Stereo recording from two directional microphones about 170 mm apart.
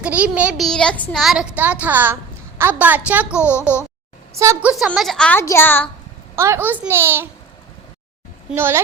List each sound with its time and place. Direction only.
0.0 s speech: 10° right (ahead or behind)
4.7 s a woman's voice: centre (ahead or behind)
6.3 s speech: 15° right (ahead or behind)
8.4 s speech: 15° right (ahead or behind)